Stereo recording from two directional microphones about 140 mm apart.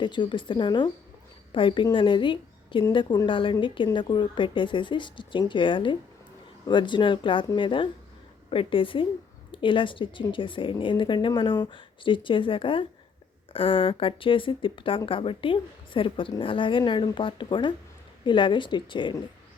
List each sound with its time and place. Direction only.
0.0 s speech: 35° left (ahead or behind)